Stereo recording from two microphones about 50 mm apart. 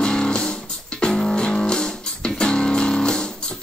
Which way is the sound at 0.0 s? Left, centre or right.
Centre.